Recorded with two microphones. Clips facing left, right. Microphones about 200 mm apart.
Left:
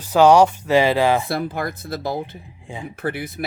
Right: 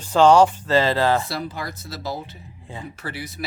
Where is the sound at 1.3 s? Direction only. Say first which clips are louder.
Left 5 dB; 55° left (ahead or behind).